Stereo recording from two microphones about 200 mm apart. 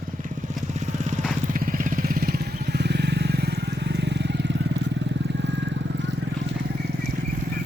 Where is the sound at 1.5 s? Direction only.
40° right (ahead or behind); by 4.6 s 60° right (ahead or behind).